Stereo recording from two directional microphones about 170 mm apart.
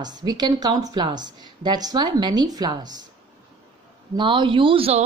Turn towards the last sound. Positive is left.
turn(degrees=-35)  # may be behind; listen again after turning